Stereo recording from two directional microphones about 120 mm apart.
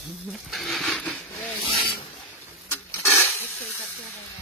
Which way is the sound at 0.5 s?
Centre (ahead or behind).